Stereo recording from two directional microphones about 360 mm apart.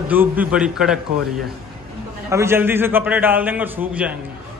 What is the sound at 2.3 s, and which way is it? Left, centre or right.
A man's voice, centre.